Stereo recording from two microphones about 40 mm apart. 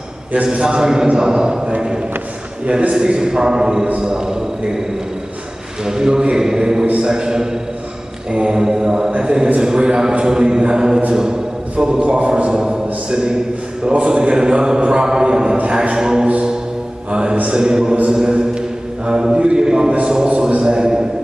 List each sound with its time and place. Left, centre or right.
0.3 s a man's voice: right
5.9 s a man's voice: centre
12.0 s speech: right
15.5 s a sound: right
17.5 s speech: centre
18.0 s mantra: right
19.3 s speech: right